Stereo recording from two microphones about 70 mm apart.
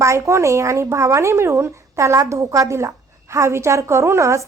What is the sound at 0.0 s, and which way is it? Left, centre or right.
A woman's voice, right.